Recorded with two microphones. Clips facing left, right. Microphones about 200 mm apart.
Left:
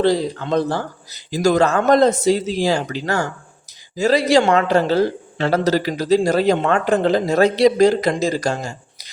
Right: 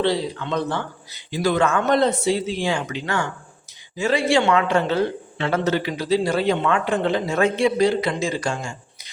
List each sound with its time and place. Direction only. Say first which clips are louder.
0.0 s speech: left 4 dB; 45° left (ahead or behind)